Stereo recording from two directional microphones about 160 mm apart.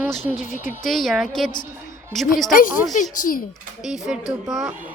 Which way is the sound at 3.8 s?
5° right (ahead or behind).